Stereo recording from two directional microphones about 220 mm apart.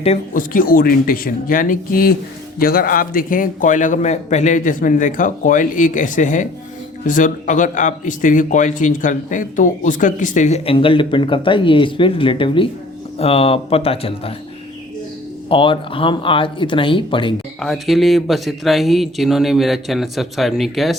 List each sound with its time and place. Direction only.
0.0 s a man's voice: 35° left (ahead or behind)
15.4 s speech: 25° left (ahead or behind)
17.6 s speech: centre (ahead or behind)